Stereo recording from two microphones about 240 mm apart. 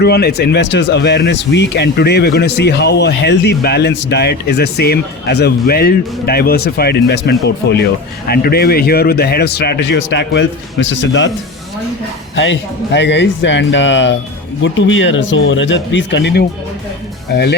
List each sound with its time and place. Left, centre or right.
0.0 s speech: left
12.4 s speech: left